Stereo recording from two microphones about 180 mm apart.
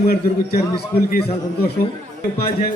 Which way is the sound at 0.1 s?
55° left (ahead or behind).